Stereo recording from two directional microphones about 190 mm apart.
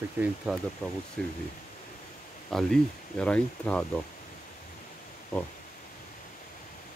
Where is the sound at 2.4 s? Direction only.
Centre (ahead or behind).